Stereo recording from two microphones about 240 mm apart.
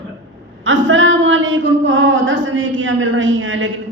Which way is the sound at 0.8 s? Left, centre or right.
Right.